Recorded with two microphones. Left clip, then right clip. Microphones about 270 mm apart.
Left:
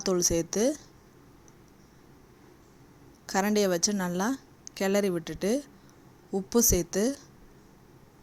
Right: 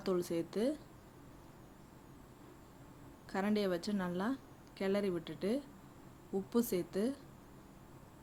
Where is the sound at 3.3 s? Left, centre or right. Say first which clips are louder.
Left 10 dB; left.